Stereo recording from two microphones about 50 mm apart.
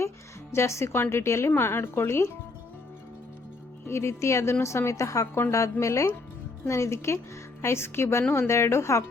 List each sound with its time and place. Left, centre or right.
0.5 s a woman's voice: left
3.8 s a woman's voice: left
6.7 s a woman's voice: left